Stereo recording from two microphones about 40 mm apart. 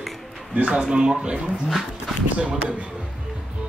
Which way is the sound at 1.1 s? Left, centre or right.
Centre.